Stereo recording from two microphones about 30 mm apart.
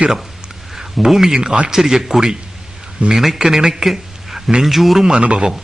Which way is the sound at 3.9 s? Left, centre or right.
Centre.